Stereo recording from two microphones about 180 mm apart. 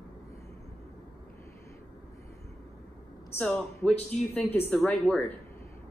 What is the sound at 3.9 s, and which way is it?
Speech, 35° left (ahead or behind).